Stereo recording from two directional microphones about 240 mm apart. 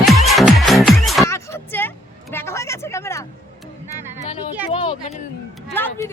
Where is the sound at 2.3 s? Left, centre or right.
Centre.